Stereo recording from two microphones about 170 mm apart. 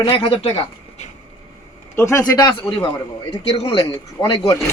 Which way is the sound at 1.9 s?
15° left (ahead or behind).